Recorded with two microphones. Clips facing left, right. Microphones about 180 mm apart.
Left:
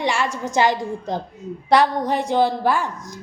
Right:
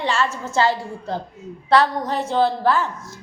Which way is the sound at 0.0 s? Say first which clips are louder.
Even; 15° left (ahead or behind).